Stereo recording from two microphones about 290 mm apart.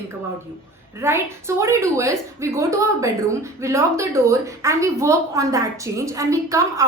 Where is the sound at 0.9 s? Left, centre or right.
Centre.